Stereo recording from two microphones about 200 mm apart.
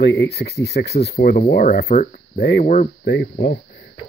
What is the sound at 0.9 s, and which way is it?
Speech, 30° left (ahead or behind).